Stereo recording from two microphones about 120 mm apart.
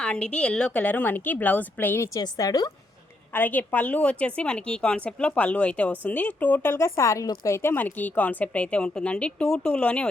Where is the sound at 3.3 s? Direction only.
15° left (ahead or behind).